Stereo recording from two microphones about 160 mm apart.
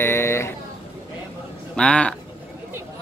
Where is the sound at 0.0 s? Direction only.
15° left (ahead or behind).